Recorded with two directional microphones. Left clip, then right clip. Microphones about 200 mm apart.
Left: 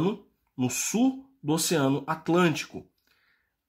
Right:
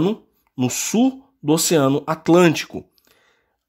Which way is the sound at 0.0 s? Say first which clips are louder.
Right 8 dB; 45° right (ahead or behind).